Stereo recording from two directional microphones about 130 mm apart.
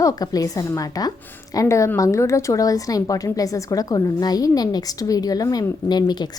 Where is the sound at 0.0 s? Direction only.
25° left (ahead or behind).